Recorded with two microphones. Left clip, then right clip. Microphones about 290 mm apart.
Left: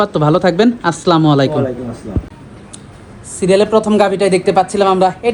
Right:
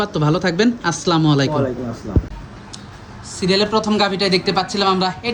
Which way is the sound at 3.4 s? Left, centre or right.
Centre.